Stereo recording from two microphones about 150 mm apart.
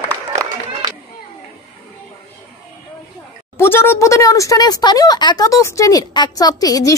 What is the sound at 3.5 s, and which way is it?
Speech, 15° left (ahead or behind).